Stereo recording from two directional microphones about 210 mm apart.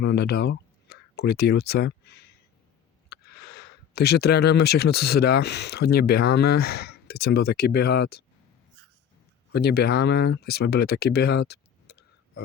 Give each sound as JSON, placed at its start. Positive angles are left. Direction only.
{"t": 0.0, "sound": "speech", "side_deg": 50}
{"t": 9.5, "sound": "speech", "side_deg": 50}